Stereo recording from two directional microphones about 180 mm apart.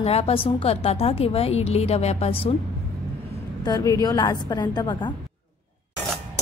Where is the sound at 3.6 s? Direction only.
20° left (ahead or behind).